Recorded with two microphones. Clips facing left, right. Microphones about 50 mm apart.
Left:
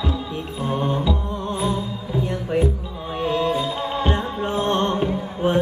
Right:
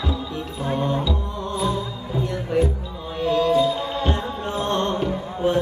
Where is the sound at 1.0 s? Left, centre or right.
Left.